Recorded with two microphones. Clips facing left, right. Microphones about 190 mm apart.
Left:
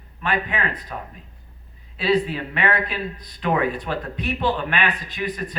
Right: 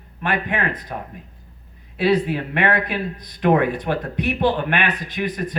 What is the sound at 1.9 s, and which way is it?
Speech, 55° right (ahead or behind).